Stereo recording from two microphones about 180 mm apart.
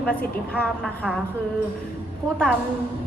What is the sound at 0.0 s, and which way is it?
A woman's voice, 5° left (ahead or behind).